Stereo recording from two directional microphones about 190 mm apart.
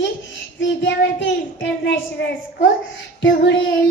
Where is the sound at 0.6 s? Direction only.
75° left (ahead or behind).